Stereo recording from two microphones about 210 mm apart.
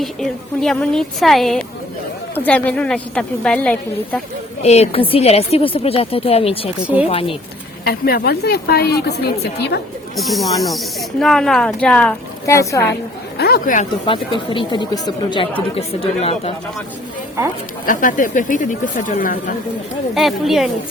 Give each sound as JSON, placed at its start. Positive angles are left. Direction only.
{"t": 0.0, "sound": "speech", "side_deg": 0}
{"t": 4.6, "sound": "speech", "side_deg": 30}
{"t": 7.9, "sound": "a woman's voice", "side_deg": 45}
{"t": 10.2, "sound": "speech", "side_deg": 0}
{"t": 13.3, "sound": "a woman's voice", "side_deg": 45}
{"t": 14.1, "sound": "speech", "side_deg": 25}
{"t": 17.8, "sound": "speech", "side_deg": 40}
{"t": 20.1, "sound": "speech", "side_deg": 0}